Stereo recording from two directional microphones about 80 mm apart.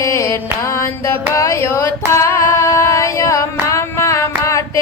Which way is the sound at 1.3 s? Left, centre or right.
Left.